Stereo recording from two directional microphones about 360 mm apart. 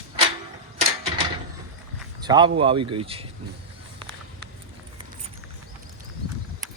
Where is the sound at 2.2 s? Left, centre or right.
Centre.